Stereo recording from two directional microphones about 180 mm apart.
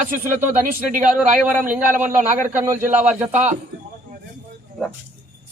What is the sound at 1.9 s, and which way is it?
Speech, 45° right (ahead or behind).